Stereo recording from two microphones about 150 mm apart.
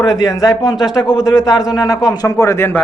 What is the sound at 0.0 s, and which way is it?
A man's voice, 25° left (ahead or behind).